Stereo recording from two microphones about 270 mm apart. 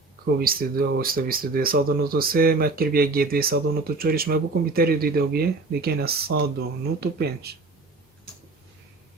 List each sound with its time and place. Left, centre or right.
0.3 s speech: right